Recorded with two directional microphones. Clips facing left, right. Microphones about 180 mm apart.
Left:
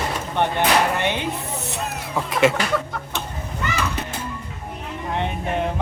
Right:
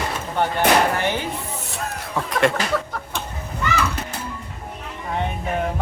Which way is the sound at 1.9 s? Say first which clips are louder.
Even; centre (ahead or behind).